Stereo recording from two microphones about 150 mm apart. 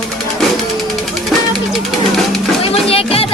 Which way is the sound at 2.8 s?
40° left (ahead or behind).